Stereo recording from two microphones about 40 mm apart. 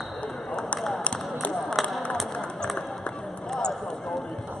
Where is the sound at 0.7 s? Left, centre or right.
Centre.